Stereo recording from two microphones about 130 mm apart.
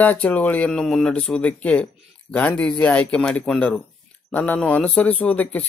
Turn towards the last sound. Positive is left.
turn(degrees=10)  # may be behind; listen again after turning